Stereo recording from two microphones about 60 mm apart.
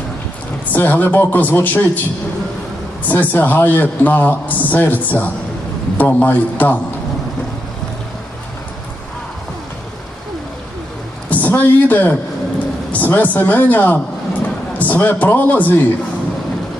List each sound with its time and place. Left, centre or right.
0.7 s a man's voice: left
11.2 s a sound: left
12.9 s a man's voice: left